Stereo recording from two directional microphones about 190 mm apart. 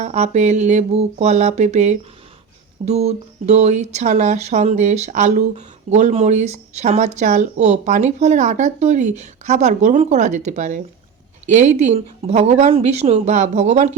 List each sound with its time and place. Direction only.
0.0 s speech: 40° right (ahead or behind)